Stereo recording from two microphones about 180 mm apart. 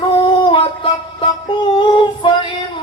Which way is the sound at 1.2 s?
25° left (ahead or behind).